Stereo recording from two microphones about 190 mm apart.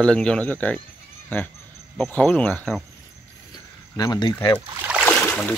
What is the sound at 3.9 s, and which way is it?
Speech, 20° left (ahead or behind).